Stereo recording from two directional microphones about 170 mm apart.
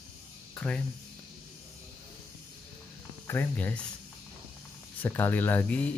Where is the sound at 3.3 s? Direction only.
10° left (ahead or behind).